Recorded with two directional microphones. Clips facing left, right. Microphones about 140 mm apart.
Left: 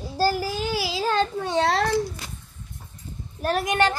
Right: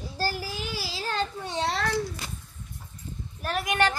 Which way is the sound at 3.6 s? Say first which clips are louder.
Left 2 dB; 30° left (ahead or behind).